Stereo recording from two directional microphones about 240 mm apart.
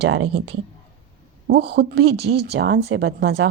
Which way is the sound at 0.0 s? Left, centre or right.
Right.